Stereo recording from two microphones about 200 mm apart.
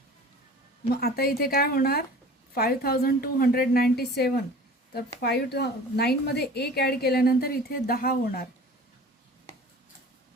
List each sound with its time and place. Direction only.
0.9 s a woman's voice: 50° left (ahead or behind)